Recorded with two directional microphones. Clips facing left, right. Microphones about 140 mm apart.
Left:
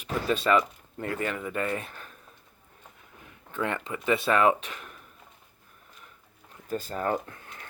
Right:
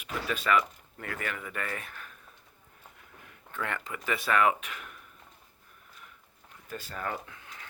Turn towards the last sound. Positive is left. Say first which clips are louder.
# left 6 dB
turn(degrees=45)  # may be behind; listen again after turning